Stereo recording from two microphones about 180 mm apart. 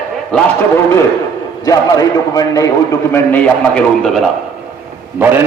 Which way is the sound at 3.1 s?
10° left (ahead or behind).